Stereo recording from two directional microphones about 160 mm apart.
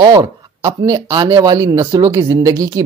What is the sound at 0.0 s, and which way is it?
Speech, 25° right (ahead or behind).